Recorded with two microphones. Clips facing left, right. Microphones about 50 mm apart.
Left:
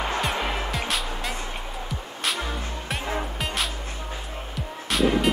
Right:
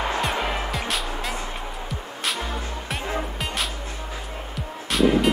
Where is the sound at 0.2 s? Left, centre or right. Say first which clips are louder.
Right 1 dB; centre.